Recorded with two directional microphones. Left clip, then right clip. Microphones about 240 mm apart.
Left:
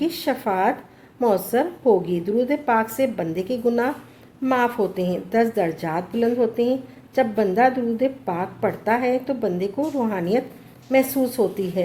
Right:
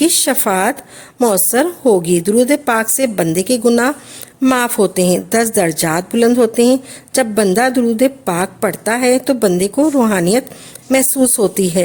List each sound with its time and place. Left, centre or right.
0.0 s a woman's voice: right